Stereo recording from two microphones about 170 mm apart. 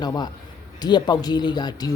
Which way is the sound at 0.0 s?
25° left (ahead or behind).